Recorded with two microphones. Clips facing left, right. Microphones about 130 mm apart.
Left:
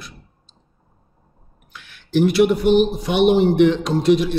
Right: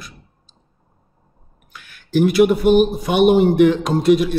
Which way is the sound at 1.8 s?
50° right (ahead or behind).